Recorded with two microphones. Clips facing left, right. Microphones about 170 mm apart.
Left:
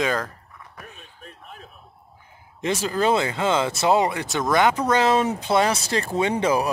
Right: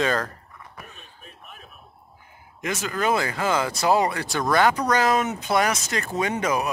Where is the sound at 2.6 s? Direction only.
30° left (ahead or behind).